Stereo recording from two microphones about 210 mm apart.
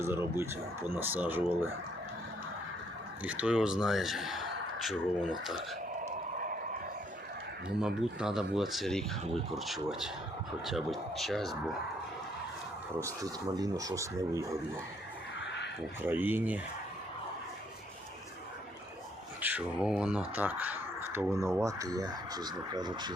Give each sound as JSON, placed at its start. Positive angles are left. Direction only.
{"t": 0.0, "sound": "speech", "side_deg": -10}
{"t": 3.2, "sound": "speech", "side_deg": -5}
{"t": 6.1, "sound": "a sound", "side_deg": -40}
{"t": 7.8, "sound": "speech", "side_deg": -5}
{"t": 13.0, "sound": "speech", "side_deg": -15}
{"t": 16.0, "sound": "speech", "side_deg": -10}
{"t": 19.4, "sound": "speech", "side_deg": -5}